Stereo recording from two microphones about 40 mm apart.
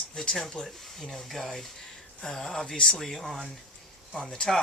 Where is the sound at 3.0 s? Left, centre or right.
Centre.